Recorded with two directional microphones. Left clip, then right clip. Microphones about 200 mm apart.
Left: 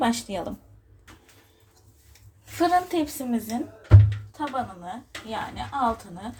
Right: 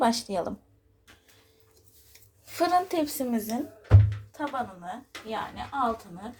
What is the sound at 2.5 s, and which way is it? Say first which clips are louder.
A woman's voice: left 2 dB; 35° right (ahead or behind).